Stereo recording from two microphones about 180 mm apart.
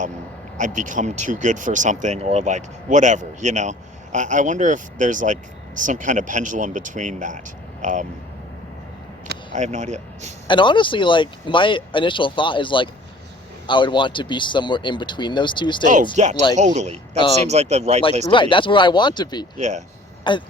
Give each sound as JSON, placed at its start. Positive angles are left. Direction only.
{"t": 0.6, "sound": "speech", "side_deg": -45}
{"t": 9.5, "sound": "speech", "side_deg": -40}
{"t": 10.4, "sound": "speech", "side_deg": 25}
{"t": 15.8, "sound": "speech", "side_deg": -45}
{"t": 18.3, "sound": "speech", "side_deg": 25}
{"t": 19.5, "sound": "speech", "side_deg": -40}
{"t": 20.3, "sound": "speech", "side_deg": 25}